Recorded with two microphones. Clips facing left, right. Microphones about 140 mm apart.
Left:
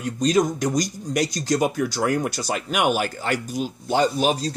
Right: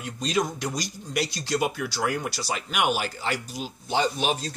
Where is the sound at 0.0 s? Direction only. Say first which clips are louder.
Left 7 dB; 45° left (ahead or behind).